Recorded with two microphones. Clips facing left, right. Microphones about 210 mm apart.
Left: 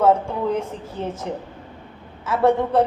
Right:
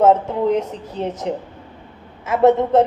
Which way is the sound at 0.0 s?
20° right (ahead or behind).